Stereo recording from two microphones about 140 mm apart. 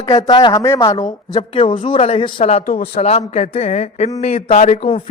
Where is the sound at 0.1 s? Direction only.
30° left (ahead or behind).